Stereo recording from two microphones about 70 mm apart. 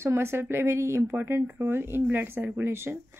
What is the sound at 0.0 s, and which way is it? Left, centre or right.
A woman's voice, right.